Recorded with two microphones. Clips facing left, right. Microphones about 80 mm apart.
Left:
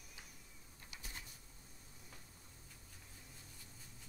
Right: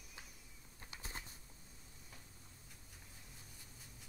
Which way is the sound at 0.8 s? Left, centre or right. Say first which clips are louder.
Right 3 dB; right.